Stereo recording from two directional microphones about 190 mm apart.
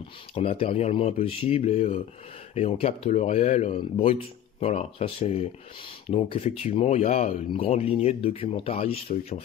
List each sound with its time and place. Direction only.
0.3 s speech: 30° left (ahead or behind)